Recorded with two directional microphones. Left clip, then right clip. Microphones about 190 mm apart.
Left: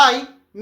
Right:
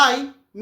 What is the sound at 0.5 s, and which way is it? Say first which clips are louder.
Music: left 3 dB; 15° right (ahead or behind).